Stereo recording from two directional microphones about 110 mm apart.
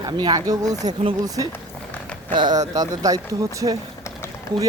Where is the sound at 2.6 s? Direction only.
35° right (ahead or behind).